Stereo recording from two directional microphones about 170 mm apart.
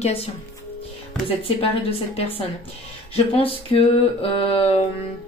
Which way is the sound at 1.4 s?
35° left (ahead or behind).